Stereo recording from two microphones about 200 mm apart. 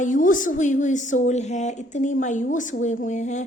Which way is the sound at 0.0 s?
40° left (ahead or behind).